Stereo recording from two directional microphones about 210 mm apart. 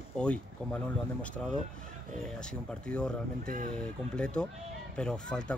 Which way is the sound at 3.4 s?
40° right (ahead or behind).